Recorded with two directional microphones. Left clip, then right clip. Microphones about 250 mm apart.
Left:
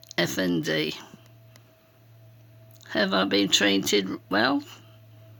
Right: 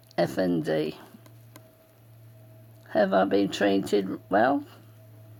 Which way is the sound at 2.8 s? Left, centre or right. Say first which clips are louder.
Right 2 dB; left.